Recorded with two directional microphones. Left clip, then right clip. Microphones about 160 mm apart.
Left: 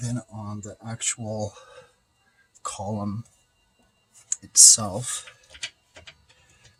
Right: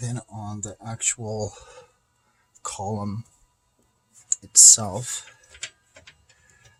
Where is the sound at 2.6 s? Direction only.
60° right (ahead or behind).